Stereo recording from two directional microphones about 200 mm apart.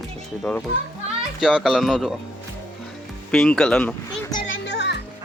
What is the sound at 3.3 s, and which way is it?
Speech, centre (ahead or behind).